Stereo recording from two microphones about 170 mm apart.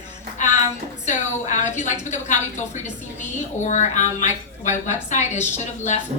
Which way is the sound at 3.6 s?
45° left (ahead or behind).